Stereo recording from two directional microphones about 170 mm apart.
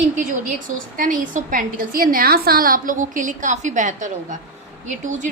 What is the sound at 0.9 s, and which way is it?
A woman's voice, 50° right (ahead or behind).